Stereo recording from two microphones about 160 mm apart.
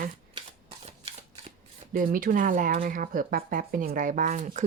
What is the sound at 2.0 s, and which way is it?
Speech, 60° right (ahead or behind).